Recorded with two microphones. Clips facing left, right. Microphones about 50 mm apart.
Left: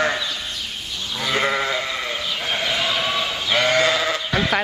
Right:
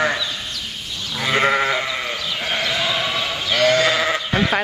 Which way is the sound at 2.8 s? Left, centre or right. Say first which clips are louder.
Right 1 dB; right.